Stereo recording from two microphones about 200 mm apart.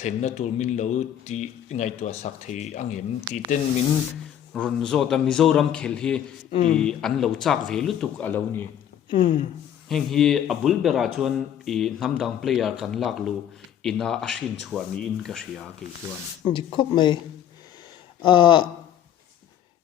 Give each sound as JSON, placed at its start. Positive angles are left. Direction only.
{"t": 0.0, "sound": "speech", "side_deg": 35}
{"t": 3.3, "sound": "speech", "side_deg": -20}
{"t": 4.5, "sound": "speech", "side_deg": 5}
{"t": 6.5, "sound": "speech", "side_deg": 35}
{"t": 6.7, "sound": "speech", "side_deg": 5}
{"t": 9.0, "sound": "speech", "side_deg": 25}
{"t": 9.9, "sound": "speech", "side_deg": 0}
{"t": 16.5, "sound": "speech", "side_deg": 25}
{"t": 18.2, "sound": "speech", "side_deg": 25}